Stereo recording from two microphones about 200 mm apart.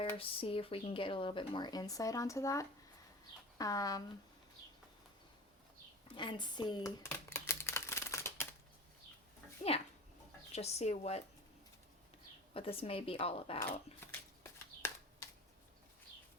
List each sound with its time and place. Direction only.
0.2 s speech: 25° left (ahead or behind)
6.1 s a sound: 25° left (ahead or behind)
10.5 s speech: 30° left (ahead or behind)
12.5 s speech: 30° left (ahead or behind)
13.6 s speech: 10° left (ahead or behind)